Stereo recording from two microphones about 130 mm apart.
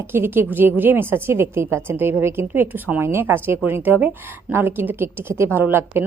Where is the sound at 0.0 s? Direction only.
15° right (ahead or behind).